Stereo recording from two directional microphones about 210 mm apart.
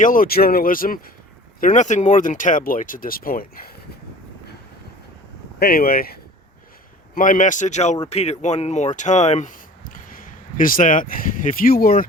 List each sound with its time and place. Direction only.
0.0 s speech: 40° left (ahead or behind)
5.5 s speech: 45° left (ahead or behind)